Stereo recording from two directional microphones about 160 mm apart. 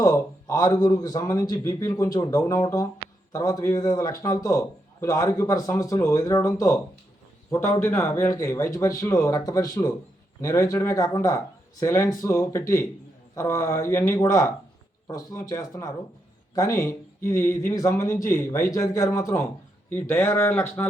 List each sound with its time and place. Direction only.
0.0 s a man's voice: 20° left (ahead or behind)